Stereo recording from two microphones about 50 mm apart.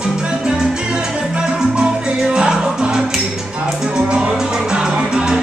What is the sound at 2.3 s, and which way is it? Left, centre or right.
Music, centre.